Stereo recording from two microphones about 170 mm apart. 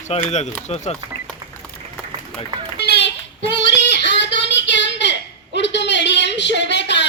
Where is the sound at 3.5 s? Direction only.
90° left.